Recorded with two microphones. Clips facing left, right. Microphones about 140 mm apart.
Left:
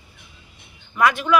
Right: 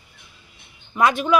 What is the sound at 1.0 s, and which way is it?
Speech, 20° right (ahead or behind).